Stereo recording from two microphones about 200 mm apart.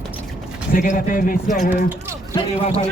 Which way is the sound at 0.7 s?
45° left (ahead or behind).